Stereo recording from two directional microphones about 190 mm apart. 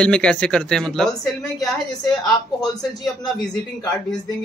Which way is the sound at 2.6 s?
20° left (ahead or behind).